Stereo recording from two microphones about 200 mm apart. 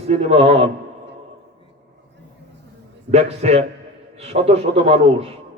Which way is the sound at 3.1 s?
35° right (ahead or behind).